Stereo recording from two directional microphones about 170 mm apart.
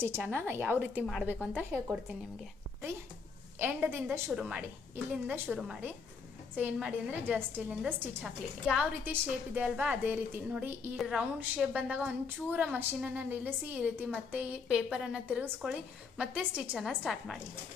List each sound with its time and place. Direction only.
0.0 s a woman's voice: 15° right (ahead or behind)
3.6 s a woman's voice: 10° right (ahead or behind)